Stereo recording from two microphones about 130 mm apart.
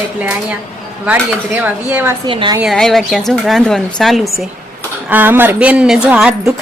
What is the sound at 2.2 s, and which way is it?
Speech, 35° right (ahead or behind).